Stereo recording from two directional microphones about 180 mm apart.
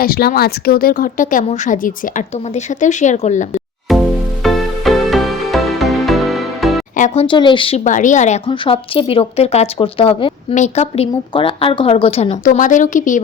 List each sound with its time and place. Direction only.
0.0 s speech: 55° left (ahead or behind)
3.9 s music: centre (ahead or behind)
6.9 s speech: 40° left (ahead or behind)
7.9 s speech: 45° left (ahead or behind)
8.4 s speech: 30° left (ahead or behind)
10.5 s speech: 40° left (ahead or behind)
12.5 s speech: 45° left (ahead or behind)